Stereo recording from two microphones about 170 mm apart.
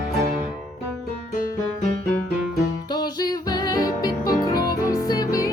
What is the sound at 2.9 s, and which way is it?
Music, 25° left (ahead or behind).